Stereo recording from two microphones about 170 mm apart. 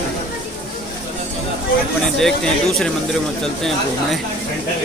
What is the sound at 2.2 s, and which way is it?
Speech, centre (ahead or behind).